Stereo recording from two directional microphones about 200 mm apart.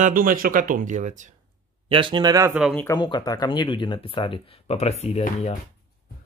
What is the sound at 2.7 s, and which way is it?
Speech, 10° left (ahead or behind).